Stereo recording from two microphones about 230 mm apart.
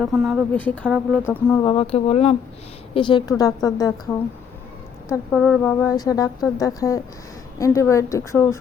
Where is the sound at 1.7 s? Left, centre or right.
Left.